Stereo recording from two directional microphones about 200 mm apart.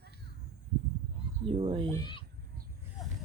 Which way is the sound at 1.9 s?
20° left (ahead or behind).